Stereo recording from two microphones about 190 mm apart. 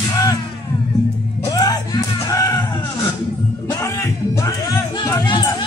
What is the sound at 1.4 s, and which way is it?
Music, 20° left (ahead or behind).